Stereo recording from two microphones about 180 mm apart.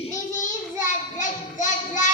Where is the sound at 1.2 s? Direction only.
45° left (ahead or behind).